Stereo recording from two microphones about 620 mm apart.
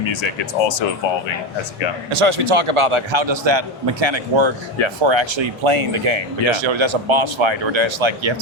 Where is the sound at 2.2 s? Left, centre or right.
Right.